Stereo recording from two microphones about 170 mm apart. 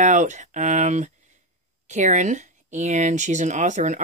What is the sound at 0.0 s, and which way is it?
Speech, 45° right (ahead or behind).